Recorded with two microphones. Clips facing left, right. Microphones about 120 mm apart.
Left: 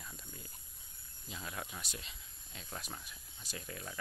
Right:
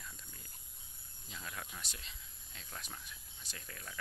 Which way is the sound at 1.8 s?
5° left (ahead or behind).